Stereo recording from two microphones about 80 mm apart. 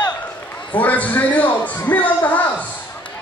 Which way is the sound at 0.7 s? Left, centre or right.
Centre.